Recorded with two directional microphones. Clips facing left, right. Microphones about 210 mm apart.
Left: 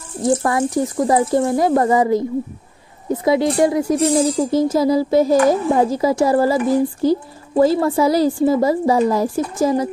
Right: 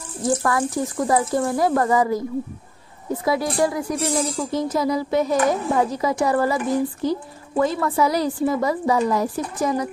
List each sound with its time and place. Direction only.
0.4 s speech: 20° left (ahead or behind)
4.3 s speech: 35° left (ahead or behind)